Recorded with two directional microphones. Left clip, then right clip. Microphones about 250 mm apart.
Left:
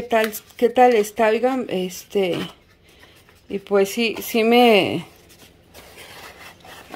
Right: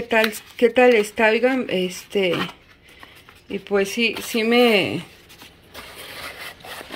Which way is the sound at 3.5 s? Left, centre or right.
Centre.